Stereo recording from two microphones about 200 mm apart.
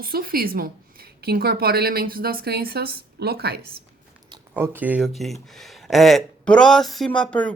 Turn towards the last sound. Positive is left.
turn(degrees=5)  # may be behind; listen again after turning